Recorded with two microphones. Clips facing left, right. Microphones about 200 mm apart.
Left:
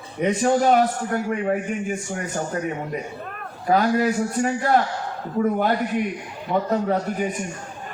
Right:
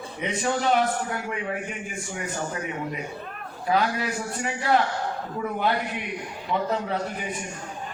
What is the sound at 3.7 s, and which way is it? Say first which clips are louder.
A man's voice: left 6 dB; 45° left (ahead or behind).